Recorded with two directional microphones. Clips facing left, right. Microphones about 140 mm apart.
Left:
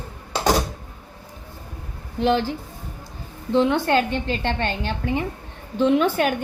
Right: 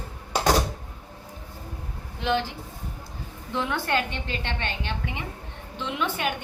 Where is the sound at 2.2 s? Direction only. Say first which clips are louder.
Left 6 dB; 35° left (ahead or behind).